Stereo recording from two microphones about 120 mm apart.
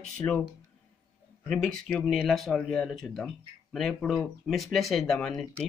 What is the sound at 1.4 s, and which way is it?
Speech, 5° left (ahead or behind).